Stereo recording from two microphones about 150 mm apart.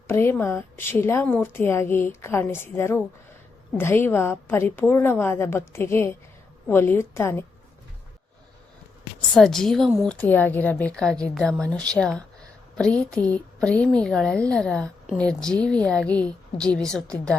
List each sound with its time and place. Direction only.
0.1 s speech: 15° left (ahead or behind)
9.3 s a woman's voice: 5° left (ahead or behind)